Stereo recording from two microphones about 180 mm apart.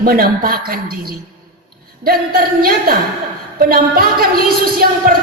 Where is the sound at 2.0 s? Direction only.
55° right (ahead or behind).